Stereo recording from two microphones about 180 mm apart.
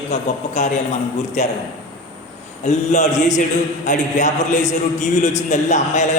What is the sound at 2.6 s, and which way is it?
A man's voice, 40° left (ahead or behind).